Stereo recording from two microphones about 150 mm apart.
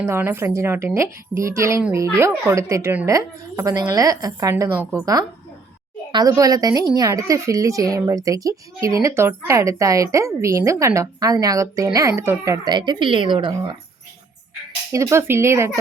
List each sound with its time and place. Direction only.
0.0 s a woman's voice: 15° right (ahead or behind)
12.6 s a woman's voice: 30° right (ahead or behind)
14.9 s a woman's voice: 20° right (ahead or behind)